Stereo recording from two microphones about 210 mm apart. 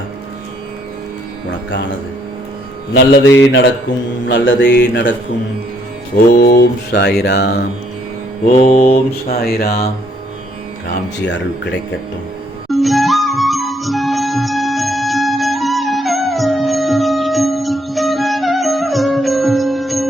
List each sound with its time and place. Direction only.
2.9 s speech: 55° left (ahead or behind)
6.4 s mantra: 50° left (ahead or behind)
8.4 s mantra: 35° left (ahead or behind)
9.3 s mantra: 45° left (ahead or behind)
10.8 s speech: 55° left (ahead or behind)
12.6 s music: centre (ahead or behind)